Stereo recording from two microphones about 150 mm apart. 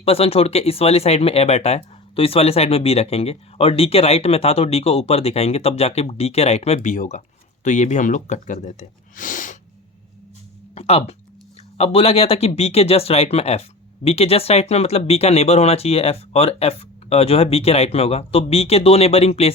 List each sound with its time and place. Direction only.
0.0 s speech: 40° left (ahead or behind); by 9.6 s 60° left (ahead or behind)
10.8 s speech: 45° left (ahead or behind)